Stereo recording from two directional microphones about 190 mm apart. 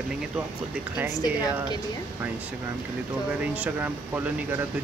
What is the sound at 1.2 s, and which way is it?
Speech, 20° left (ahead or behind).